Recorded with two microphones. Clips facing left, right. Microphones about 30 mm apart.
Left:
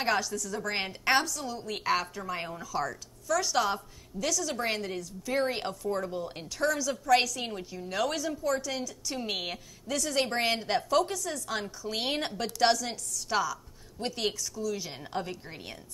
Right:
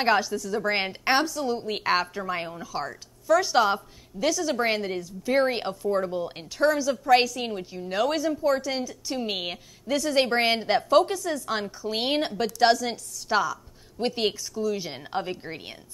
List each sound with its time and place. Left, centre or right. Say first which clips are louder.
0.0 s a woman's voice: right 6 dB; right